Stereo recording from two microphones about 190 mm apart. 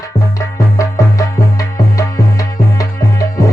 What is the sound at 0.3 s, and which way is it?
Music, 15° left (ahead or behind).